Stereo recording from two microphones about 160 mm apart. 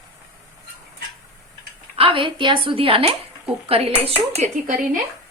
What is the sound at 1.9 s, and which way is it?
A woman's voice, 35° right (ahead or behind).